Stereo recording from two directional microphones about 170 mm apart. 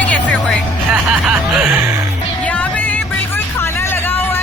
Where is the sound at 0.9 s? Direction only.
10° right (ahead or behind).